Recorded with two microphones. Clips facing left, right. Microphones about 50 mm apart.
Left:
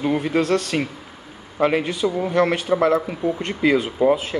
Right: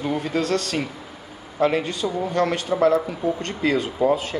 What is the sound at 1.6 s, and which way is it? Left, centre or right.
A man's voice, centre.